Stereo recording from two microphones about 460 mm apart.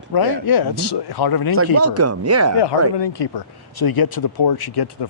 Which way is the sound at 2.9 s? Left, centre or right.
Left.